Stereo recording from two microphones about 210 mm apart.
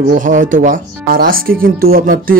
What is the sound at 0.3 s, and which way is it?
Speech, 35° right (ahead or behind).